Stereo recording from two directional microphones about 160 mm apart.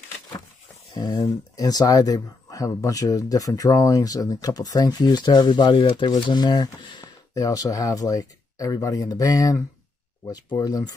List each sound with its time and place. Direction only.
0.9 s speech: 30° left (ahead or behind)